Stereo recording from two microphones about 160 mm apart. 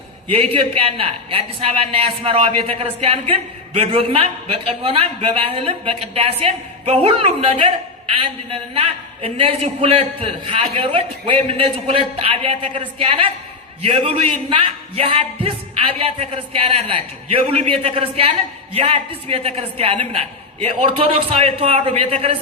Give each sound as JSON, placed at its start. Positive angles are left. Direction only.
{"t": 0.3, "sound": "speech", "side_deg": -35}